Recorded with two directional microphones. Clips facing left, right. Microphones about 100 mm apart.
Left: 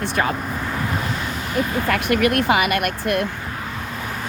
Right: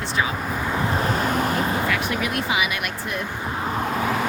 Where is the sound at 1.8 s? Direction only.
60° left (ahead or behind).